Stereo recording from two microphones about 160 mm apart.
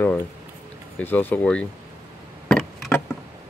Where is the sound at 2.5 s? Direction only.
5° left (ahead or behind).